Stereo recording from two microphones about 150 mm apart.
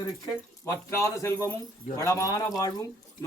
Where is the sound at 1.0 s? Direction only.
20° left (ahead or behind).